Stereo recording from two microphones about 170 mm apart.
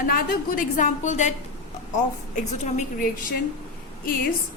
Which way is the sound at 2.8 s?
55° left (ahead or behind).